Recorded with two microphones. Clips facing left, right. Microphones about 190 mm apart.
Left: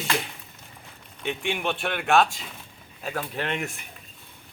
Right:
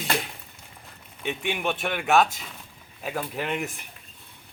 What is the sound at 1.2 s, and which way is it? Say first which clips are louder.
Speech: even; 5° right (ahead or behind).